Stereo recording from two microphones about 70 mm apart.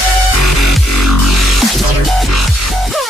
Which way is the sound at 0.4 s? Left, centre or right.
Centre.